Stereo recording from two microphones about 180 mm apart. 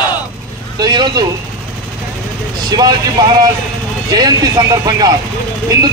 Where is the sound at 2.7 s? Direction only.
20° right (ahead or behind).